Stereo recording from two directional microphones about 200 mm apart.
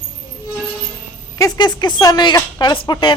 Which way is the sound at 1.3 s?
20° left (ahead or behind).